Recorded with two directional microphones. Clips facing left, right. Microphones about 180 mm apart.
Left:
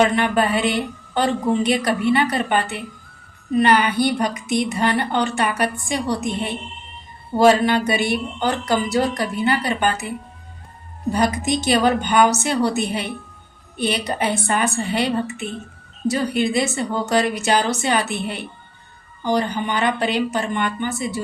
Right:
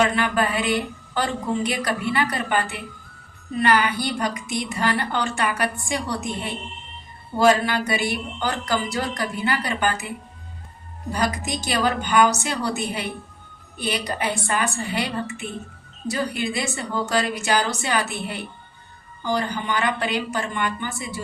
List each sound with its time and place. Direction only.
0.0 s a woman's voice: 25° left (ahead or behind)
11.1 s a woman's voice: 20° left (ahead or behind)